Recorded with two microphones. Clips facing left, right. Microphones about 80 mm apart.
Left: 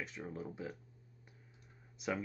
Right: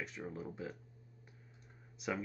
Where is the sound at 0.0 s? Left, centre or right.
Centre.